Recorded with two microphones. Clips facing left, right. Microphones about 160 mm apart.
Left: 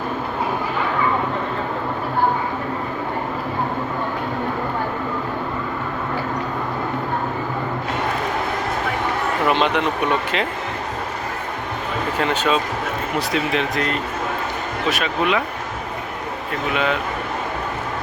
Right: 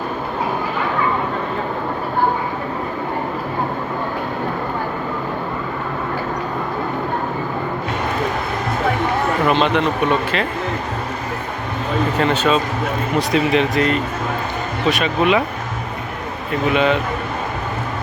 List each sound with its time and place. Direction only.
9.5 s speech: 15° left (ahead or behind)
12.2 s speech: 10° left (ahead or behind)
13.1 s speech: centre (ahead or behind)
16.7 s speech: centre (ahead or behind)